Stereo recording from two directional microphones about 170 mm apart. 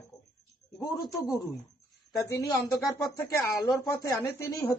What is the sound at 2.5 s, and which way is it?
Speech, 20° left (ahead or behind).